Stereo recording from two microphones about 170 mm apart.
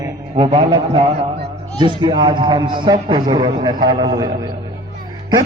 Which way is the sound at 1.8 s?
30° right (ahead or behind).